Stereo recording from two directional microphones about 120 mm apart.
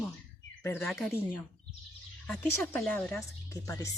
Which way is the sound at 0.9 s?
Centre (ahead or behind).